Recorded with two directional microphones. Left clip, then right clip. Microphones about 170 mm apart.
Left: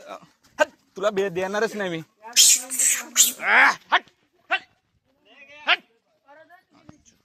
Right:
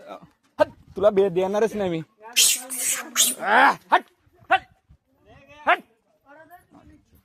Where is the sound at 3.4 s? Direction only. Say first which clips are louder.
Even; 35° right (ahead or behind).